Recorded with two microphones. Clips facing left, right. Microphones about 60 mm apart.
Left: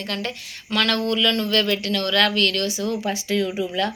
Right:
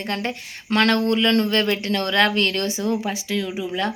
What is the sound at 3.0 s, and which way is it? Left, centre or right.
Speech, centre.